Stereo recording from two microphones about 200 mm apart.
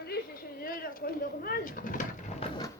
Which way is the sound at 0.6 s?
45° left (ahead or behind).